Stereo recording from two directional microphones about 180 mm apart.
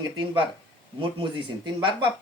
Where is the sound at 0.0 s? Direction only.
20° right (ahead or behind).